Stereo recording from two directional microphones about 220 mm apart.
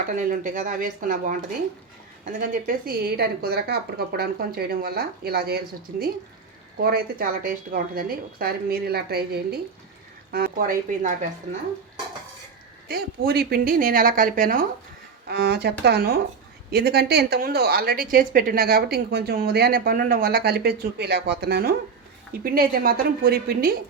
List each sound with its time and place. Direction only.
0.1 s a woman's voice: 40° right (ahead or behind)
12.9 s a woman's voice: 45° right (ahead or behind)